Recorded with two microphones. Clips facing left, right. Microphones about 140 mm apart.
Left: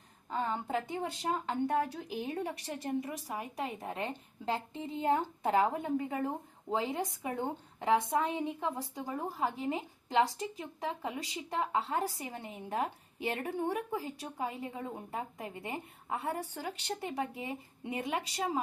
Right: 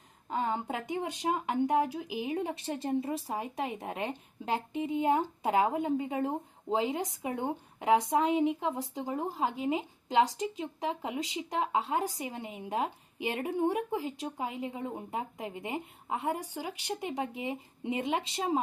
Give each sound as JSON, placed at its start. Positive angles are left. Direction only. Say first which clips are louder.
{"t": 0.3, "sound": "speech", "louder": "right 2 dB", "side_deg": -20}